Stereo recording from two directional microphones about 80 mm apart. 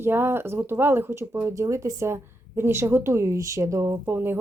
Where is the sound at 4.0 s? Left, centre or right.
Right.